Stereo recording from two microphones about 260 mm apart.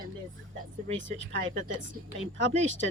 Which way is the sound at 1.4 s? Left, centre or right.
Right.